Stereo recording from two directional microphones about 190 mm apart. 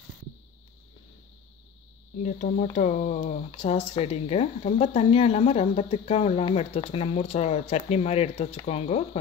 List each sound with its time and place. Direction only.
2.2 s speech: 45° left (ahead or behind)